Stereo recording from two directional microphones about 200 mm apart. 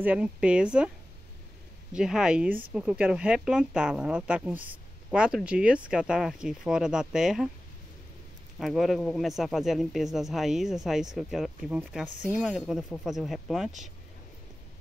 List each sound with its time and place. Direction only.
0.0 s speech: 5° right (ahead or behind)
2.0 s speech: 5° right (ahead or behind)
8.5 s speech: centre (ahead or behind)